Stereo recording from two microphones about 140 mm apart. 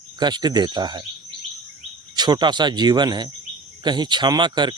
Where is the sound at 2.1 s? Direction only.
30° right (ahead or behind).